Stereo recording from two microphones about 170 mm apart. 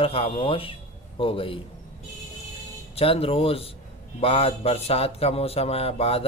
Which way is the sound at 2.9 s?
35° left (ahead or behind).